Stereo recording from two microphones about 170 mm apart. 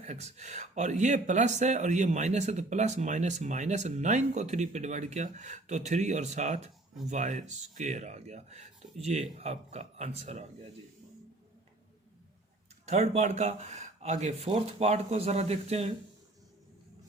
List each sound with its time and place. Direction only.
0.0 s speech: 40° right (ahead or behind)
12.8 s speech: 40° right (ahead or behind)